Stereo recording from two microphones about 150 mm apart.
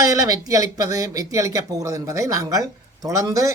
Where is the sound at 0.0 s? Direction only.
20° right (ahead or behind).